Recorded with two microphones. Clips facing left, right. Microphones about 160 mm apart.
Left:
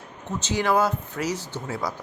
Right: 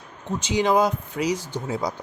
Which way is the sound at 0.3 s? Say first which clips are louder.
Right 2 dB; 10° right (ahead or behind).